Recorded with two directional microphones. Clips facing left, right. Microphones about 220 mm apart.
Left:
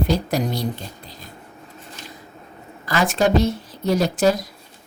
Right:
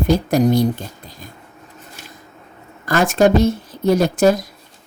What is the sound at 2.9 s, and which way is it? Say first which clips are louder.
Speech: right 5 dB; 50° right (ahead or behind).